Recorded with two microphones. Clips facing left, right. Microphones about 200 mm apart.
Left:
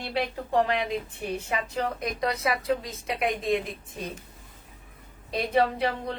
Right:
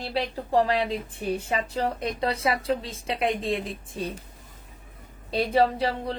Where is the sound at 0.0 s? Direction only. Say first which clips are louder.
Right 1 dB; 35° right (ahead or behind).